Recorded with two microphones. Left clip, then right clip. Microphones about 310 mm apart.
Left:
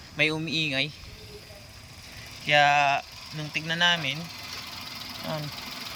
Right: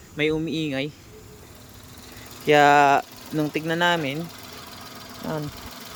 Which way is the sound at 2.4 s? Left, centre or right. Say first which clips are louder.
Right 5 dB; centre.